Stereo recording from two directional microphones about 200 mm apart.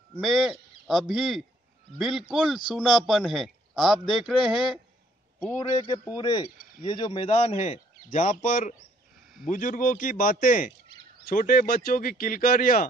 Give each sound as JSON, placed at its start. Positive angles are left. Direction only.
{"t": 0.1, "sound": "a man's voice", "side_deg": 0}
{"t": 6.1, "sound": "a man's voice", "side_deg": 20}